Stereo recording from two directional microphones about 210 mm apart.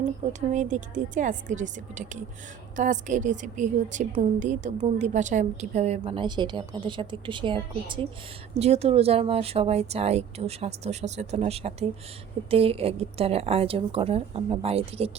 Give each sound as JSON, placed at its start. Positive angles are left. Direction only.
{"t": 0.3, "sound": "a woman's voice", "side_deg": -35}